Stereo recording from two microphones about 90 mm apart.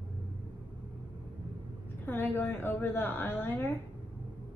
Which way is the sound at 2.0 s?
20° left (ahead or behind).